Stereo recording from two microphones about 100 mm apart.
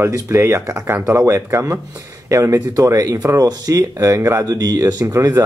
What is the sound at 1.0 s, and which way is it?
Speech, 30° right (ahead or behind).